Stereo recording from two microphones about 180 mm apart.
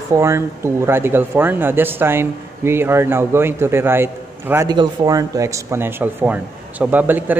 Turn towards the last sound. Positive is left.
turn(degrees=-10)  # may be behind; listen again after turning